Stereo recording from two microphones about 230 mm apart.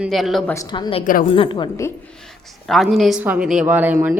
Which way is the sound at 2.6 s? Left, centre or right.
Centre.